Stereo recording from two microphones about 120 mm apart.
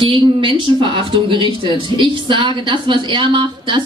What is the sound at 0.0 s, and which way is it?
A woman's voice, 45° right (ahead or behind).